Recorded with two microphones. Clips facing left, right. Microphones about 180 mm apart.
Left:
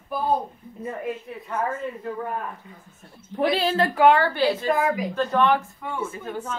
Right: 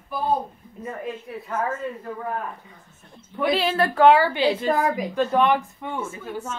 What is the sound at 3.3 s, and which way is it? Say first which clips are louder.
Speech: even; 30° left (ahead or behind).